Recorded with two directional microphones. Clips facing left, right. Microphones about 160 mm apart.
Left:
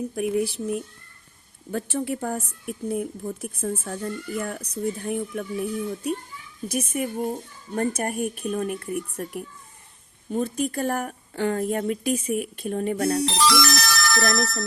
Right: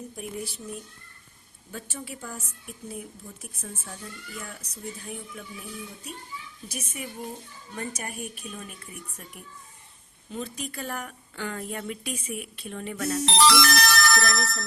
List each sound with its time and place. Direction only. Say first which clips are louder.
0.2 s a woman's voice: left 13 dB; 65° left (ahead or behind); by 13.1 s 40° left (ahead or behind)
13.4 s music: right 5 dB; 60° right (ahead or behind)
14.2 s speech: left 4 dB; 45° left (ahead or behind)